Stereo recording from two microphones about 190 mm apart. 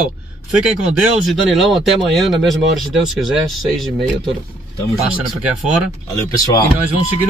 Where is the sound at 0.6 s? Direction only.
Centre (ahead or behind).